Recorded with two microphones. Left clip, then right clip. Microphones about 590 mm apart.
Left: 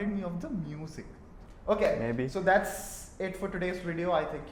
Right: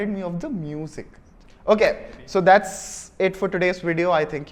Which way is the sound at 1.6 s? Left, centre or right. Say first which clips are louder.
Right 9 dB; right.